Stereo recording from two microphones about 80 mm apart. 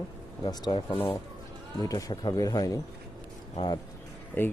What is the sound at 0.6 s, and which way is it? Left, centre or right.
Speech, left.